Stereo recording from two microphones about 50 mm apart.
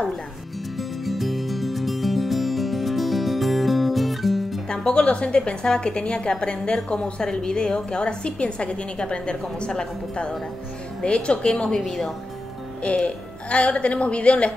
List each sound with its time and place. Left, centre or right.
0.7 s music: centre
4.6 s a woman's voice: centre
11.8 s a woman's voice: centre
12.8 s a woman's voice: left